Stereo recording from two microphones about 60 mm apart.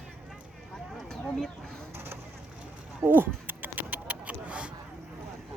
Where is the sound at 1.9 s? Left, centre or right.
Right.